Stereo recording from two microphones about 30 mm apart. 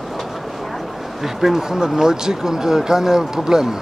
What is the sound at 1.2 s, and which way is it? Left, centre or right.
Speech, centre.